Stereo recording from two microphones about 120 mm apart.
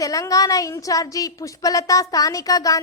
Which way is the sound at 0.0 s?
30° left (ahead or behind).